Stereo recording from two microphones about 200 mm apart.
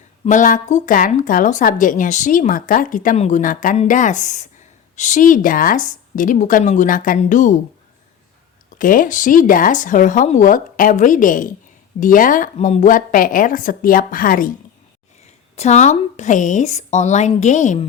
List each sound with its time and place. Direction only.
0.3 s speech: 40° left (ahead or behind)
8.8 s a woman's voice: 45° left (ahead or behind)
15.5 s speech: 35° left (ahead or behind)